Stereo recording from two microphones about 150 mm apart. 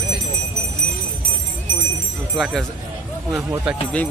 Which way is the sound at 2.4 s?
Centre (ahead or behind).